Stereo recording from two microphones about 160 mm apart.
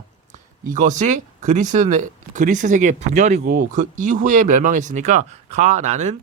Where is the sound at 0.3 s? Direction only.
50° right (ahead or behind).